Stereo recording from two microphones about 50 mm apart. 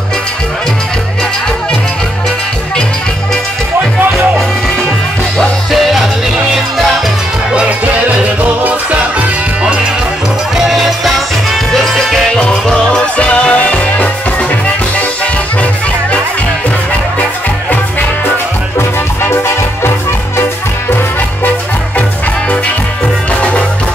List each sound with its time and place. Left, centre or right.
5.7 s music: centre
10.6 s music: centre
12.4 s music: centre
19.3 s music: left